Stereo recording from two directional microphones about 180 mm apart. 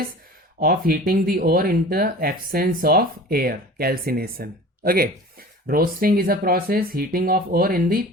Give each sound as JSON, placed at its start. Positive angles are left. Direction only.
{"t": 0.6, "sound": "speech", "side_deg": -55}